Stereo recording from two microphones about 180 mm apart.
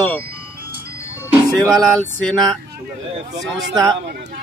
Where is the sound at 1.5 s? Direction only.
Centre (ahead or behind).